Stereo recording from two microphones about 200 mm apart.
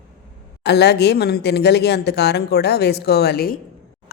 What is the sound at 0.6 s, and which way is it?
A woman's voice, 55° left (ahead or behind).